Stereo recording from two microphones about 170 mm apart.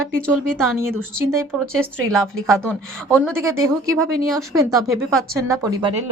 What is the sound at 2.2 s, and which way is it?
Speech, 15° right (ahead or behind).